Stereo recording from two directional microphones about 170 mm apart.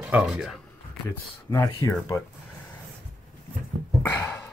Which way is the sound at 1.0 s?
15° left (ahead or behind).